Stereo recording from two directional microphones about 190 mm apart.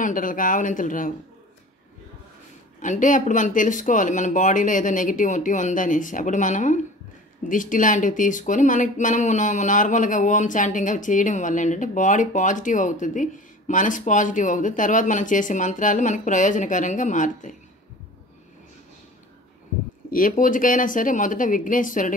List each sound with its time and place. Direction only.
0.0 s speech: 45° left (ahead or behind)
2.8 s speech: 40° left (ahead or behind)
20.1 s speech: 45° left (ahead or behind)